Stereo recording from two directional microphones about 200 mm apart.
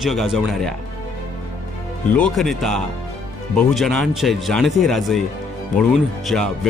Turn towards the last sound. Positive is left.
turn(degrees=5)  # may be behind; listen again after turning